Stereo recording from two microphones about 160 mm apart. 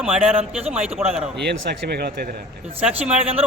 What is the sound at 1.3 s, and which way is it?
Speech, 90° right.